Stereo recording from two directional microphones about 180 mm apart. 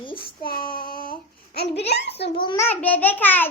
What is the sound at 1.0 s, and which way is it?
A child's voice, 55° left (ahead or behind).